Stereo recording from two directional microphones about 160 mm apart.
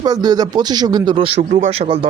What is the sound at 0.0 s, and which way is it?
Speech, 25° right (ahead or behind).